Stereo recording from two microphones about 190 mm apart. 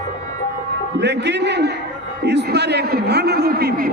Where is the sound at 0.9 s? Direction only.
65° right (ahead or behind).